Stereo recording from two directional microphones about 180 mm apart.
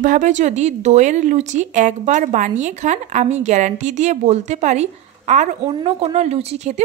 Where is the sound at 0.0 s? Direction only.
45° right (ahead or behind).